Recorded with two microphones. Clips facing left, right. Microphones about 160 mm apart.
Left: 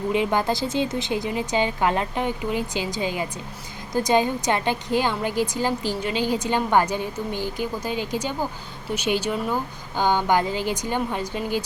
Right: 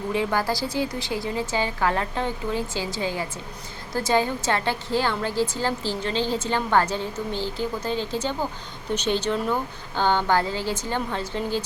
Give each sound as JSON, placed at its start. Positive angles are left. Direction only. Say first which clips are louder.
{"t": 0.1, "sound": "a woman's voice", "louder": "left 2 dB", "side_deg": 20}